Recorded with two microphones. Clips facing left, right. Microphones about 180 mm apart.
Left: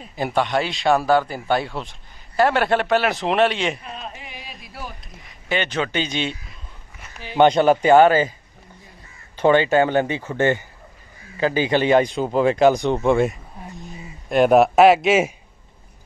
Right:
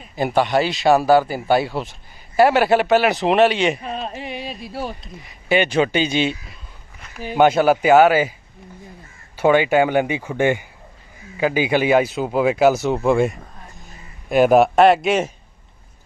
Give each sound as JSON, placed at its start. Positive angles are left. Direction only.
{"t": 0.1, "sound": "speech", "side_deg": 0}
{"t": 3.8, "sound": "a sound", "side_deg": -35}
{"t": 4.4, "sound": "speech", "side_deg": -30}
{"t": 5.2, "sound": "speech", "side_deg": -10}
{"t": 7.3, "sound": "speech", "side_deg": -5}
{"t": 9.4, "sound": "speech", "side_deg": -10}